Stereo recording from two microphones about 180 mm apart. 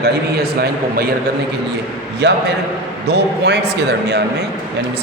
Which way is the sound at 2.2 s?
70° right (ahead or behind).